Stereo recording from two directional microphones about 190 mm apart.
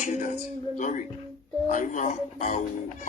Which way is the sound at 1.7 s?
40° left (ahead or behind).